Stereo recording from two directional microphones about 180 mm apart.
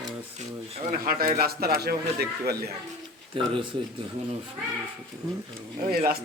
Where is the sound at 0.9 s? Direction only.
55° right (ahead or behind).